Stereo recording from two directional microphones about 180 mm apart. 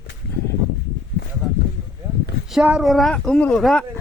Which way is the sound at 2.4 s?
5° right (ahead or behind).